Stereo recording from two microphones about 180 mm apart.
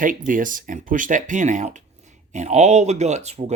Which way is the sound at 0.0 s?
50° right (ahead or behind).